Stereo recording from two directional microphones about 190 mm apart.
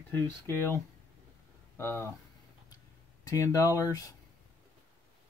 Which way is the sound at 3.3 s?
15° left (ahead or behind).